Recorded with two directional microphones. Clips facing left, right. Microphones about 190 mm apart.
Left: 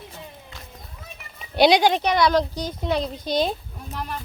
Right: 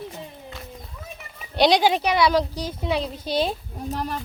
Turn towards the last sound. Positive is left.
turn(degrees=-40)  # may be behind; listen again after turning